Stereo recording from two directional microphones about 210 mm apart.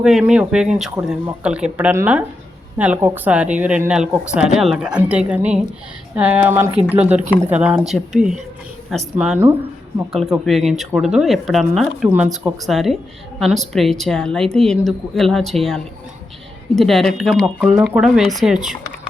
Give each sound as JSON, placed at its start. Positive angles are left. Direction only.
{"t": 0.0, "sound": "a woman's voice", "side_deg": -5}